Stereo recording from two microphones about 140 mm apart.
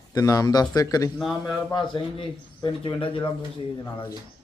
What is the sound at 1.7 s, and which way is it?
A man's voice, 35° left (ahead or behind).